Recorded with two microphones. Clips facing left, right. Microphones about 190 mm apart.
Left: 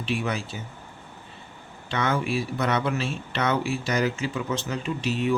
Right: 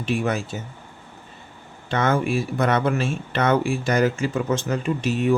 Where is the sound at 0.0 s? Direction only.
45° right (ahead or behind).